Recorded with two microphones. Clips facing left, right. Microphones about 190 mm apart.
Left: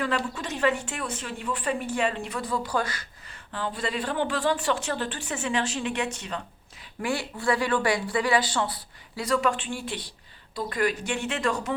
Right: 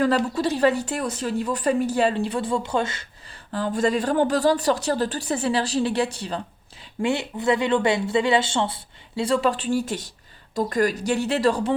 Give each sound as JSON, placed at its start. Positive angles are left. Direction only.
{"t": 0.3, "sound": "speech", "side_deg": -35}
{"t": 3.5, "sound": "speech", "side_deg": -45}
{"t": 7.0, "sound": "speech", "side_deg": -20}